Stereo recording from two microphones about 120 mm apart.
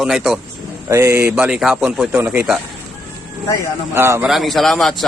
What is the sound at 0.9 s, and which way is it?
Speech, 25° right (ahead or behind).